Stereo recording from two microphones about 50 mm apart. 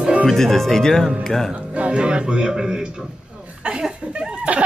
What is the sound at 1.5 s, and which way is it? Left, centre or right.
Speech, right.